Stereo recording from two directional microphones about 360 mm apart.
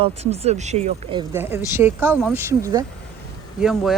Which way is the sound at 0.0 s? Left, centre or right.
Centre.